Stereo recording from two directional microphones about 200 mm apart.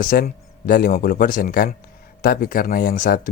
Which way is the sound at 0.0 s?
45° left (ahead or behind).